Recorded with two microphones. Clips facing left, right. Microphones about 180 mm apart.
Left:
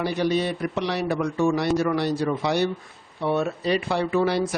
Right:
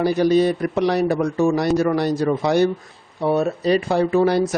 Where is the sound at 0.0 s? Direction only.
40° right (ahead or behind).